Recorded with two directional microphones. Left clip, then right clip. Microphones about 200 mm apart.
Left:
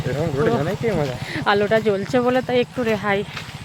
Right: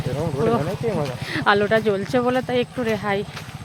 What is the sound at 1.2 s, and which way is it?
Speech, 5° right (ahead or behind).